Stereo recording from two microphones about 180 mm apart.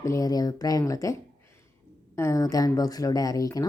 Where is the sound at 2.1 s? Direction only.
15° left (ahead or behind).